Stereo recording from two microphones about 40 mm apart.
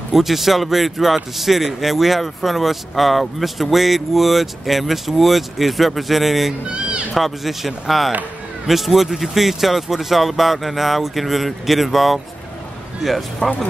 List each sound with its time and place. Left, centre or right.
0.1 s speech: centre
6.7 s speech: right
7.2 s speech: centre